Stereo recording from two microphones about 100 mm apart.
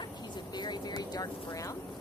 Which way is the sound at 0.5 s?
45° left (ahead or behind).